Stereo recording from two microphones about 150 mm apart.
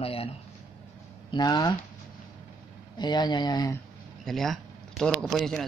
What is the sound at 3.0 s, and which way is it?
Speech, 30° left (ahead or behind).